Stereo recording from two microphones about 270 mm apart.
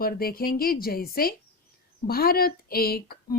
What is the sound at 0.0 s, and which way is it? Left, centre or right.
A woman's voice, left.